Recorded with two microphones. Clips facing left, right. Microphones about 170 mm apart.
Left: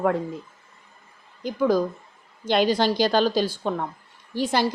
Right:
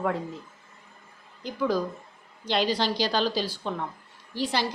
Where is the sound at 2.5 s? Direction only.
50° left (ahead or behind).